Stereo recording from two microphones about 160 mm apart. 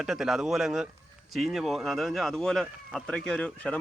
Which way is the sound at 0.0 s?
Centre (ahead or behind).